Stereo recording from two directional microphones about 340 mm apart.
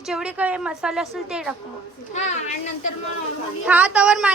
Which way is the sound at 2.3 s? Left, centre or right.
Left.